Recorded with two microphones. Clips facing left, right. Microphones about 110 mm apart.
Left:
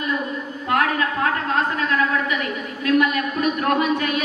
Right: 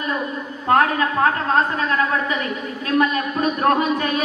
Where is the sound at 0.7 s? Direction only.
30° right (ahead or behind).